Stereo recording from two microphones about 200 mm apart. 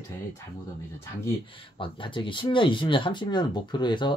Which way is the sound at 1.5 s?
25° left (ahead or behind).